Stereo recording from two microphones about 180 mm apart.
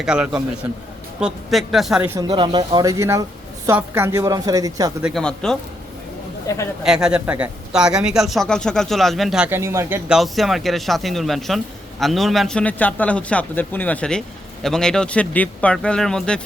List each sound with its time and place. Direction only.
0.0 s speech: 5° right (ahead or behind)
2.1 s a woman's voice: 25° right (ahead or behind)
5.0 s speech: centre (ahead or behind)
6.5 s speech: 20° left (ahead or behind)
6.8 s speech: 5° right (ahead or behind)
10.1 s speech: centre (ahead or behind)